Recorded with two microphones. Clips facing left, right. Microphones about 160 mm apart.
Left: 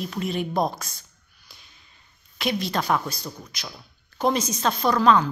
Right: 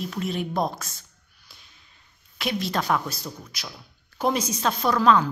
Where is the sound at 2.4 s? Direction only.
Centre (ahead or behind).